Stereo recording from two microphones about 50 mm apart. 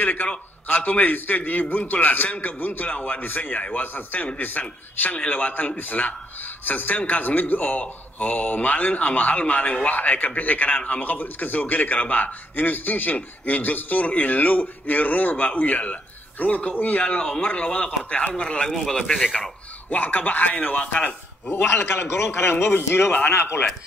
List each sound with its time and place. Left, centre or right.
0.0 s a man's voice: left
18.3 s speech: centre
19.9 s a man's voice: left
21.5 s a man's voice: left